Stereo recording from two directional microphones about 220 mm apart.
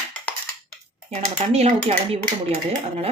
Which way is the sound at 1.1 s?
30° right (ahead or behind).